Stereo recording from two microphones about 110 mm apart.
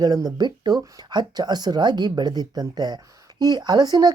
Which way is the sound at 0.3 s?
40° right (ahead or behind).